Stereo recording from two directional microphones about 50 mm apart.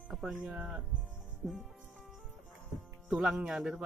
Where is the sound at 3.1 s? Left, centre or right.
Centre.